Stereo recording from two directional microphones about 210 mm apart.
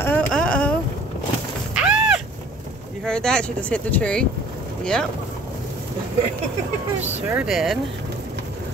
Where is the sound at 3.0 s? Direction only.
5° left (ahead or behind).